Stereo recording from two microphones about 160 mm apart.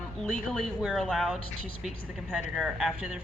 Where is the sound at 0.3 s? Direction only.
Centre (ahead or behind).